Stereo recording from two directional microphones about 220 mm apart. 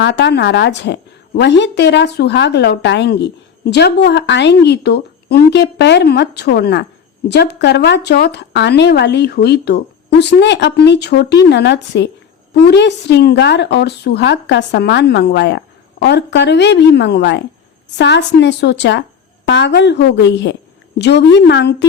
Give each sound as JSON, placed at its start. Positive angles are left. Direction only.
{"t": 0.0, "sound": "speech", "side_deg": 55}